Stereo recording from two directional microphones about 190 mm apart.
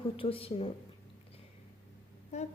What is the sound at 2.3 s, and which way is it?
Speech, 35° left (ahead or behind).